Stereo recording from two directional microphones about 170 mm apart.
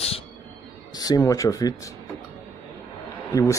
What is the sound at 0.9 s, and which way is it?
Speech, 20° left (ahead or behind).